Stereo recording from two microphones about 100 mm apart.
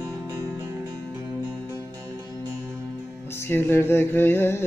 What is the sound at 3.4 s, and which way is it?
Music, 20° left (ahead or behind).